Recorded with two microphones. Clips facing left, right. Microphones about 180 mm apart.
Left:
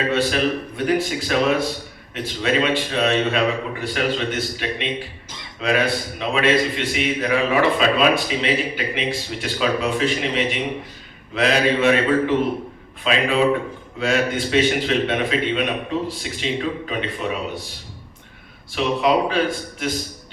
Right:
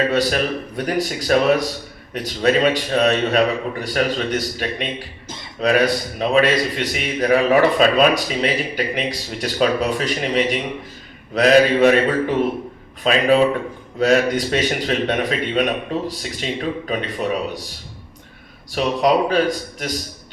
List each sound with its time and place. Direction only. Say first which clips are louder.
0.1 s a man's voice: right 1 dB; 40° right (ahead or behind)
13.1 s a man's voice: right 3 dB; 40° right (ahead or behind)
18.7 s a man's voice: right 2 dB; 40° right (ahead or behind)